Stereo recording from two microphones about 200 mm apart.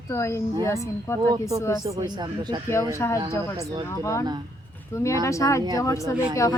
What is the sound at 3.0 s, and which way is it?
A woman's voice, 15° left (ahead or behind).